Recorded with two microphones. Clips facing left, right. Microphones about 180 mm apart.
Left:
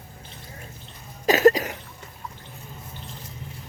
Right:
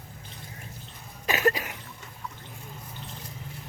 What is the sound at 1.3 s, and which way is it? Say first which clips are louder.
Cough: left 9 dB; 40° left (ahead or behind).